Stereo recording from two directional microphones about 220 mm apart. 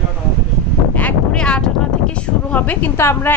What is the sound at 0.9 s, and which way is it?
Speech, 5° left (ahead or behind).